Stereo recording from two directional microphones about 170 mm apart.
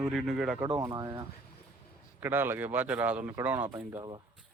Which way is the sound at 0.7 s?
20° right (ahead or behind).